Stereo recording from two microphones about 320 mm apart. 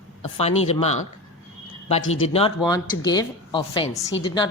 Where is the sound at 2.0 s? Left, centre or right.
Left.